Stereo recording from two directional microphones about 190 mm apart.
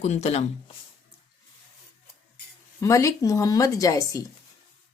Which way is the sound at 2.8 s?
15° left (ahead or behind).